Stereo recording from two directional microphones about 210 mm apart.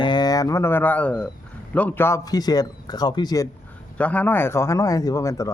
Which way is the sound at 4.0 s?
5° left (ahead or behind).